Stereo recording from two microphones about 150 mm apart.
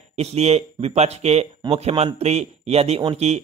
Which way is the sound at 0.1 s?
45° right (ahead or behind).